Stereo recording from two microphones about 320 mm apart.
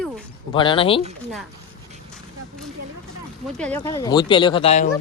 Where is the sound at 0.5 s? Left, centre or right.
Centre.